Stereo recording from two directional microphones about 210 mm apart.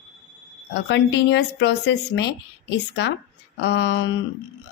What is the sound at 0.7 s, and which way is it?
Speech, 55° left (ahead or behind).